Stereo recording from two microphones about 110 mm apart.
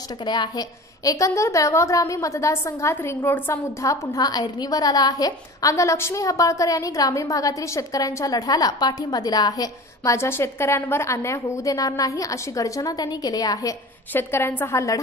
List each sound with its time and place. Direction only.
0.2 s a woman's voice: 40° left (ahead or behind); by 3.5 s 20° left (ahead or behind)
3.8 s a woman's voice: 30° left (ahead or behind)
14.1 s a woman's voice: 20° left (ahead or behind)